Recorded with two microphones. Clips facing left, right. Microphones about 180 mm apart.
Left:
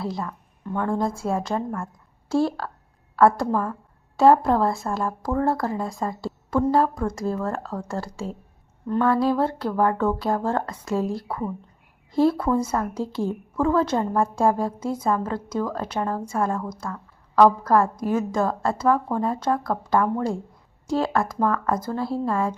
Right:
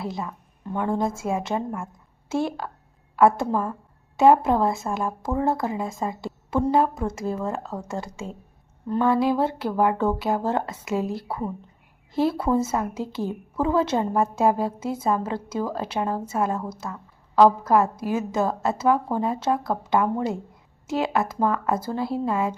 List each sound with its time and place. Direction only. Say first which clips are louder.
0.0 s a woman's voice: left 1 dB; 20° right (ahead or behind)
7.3 s speech: left 1 dB; centre (ahead or behind)
9.3 s a woman's voice: even; 25° right (ahead or behind)